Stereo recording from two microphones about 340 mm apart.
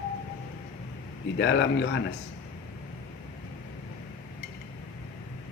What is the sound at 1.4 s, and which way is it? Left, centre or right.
Speech, left.